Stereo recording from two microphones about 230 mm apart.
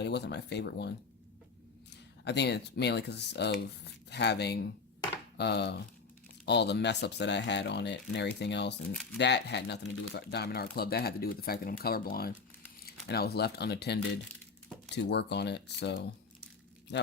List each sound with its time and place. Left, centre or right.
0.0 s speech: left
2.2 s speech: left